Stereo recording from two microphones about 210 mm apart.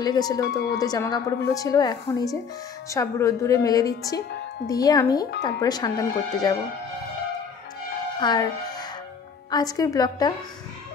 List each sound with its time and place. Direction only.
0.0 s speech: 20° left (ahead or behind)
8.2 s speech: 20° left (ahead or behind)